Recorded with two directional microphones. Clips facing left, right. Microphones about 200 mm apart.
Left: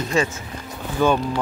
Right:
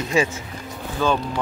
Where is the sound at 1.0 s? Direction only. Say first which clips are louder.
Left 3 dB; 15° left (ahead or behind).